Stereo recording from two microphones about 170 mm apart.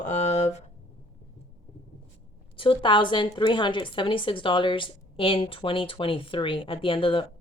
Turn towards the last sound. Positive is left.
turn(degrees=30)  # may be behind; listen again after turning